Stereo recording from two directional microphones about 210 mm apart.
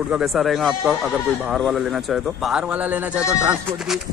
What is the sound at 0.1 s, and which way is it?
Speech, centre (ahead or behind).